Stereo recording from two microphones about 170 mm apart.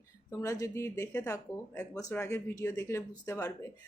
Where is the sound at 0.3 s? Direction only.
20° left (ahead or behind).